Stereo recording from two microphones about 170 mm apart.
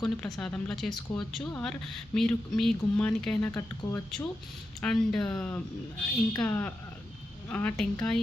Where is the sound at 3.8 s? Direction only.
20° left (ahead or behind).